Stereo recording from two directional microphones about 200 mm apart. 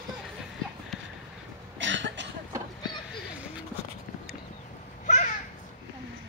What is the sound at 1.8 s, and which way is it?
Cough, 65° right (ahead or behind).